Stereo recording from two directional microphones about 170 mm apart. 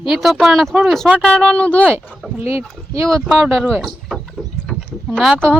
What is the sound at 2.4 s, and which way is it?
Speech, 15° right (ahead or behind).